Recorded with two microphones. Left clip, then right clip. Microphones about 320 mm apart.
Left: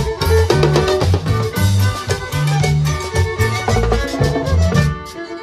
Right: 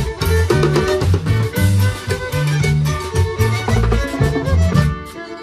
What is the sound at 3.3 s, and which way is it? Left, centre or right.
Music, centre.